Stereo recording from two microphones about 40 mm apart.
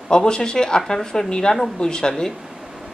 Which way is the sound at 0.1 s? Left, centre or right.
Left.